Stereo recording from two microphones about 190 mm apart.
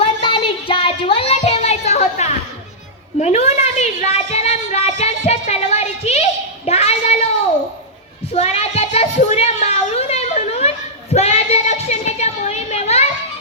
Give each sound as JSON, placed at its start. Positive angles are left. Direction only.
{"t": 0.0, "sound": "a sound", "side_deg": 30}
{"t": 3.2, "sound": "a woman's voice", "side_deg": 35}
{"t": 6.7, "sound": "child singing", "side_deg": 35}
{"t": 8.3, "sound": "child singing", "side_deg": 35}